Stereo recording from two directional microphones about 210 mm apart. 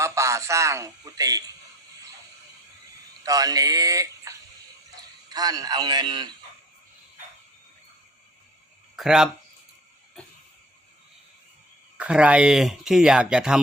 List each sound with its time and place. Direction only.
0.0 s speech: 15° right (ahead or behind)
3.2 s a man's voice: 15° right (ahead or behind)
9.0 s speech: centre (ahead or behind)
11.9 s speech: 5° right (ahead or behind)